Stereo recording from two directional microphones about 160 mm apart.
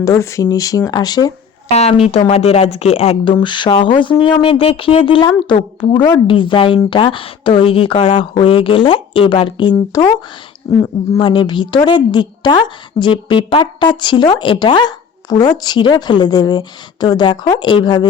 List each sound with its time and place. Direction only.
0.0 s a woman's voice: 20° left (ahead or behind)
1.7 s a woman's voice: 40° left (ahead or behind); by 10.8 s 20° left (ahead or behind)
11.2 s a woman's voice: 30° left (ahead or behind)